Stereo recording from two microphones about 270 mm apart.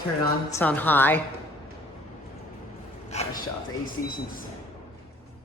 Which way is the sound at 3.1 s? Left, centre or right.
Left.